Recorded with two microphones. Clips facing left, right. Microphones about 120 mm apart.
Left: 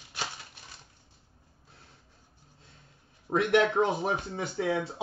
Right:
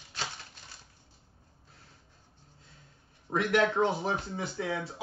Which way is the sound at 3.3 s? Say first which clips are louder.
Left 3 dB; 25° left (ahead or behind).